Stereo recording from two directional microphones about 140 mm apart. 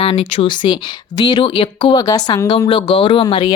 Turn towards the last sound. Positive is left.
turn(degrees=35)  # may be behind; listen again after turning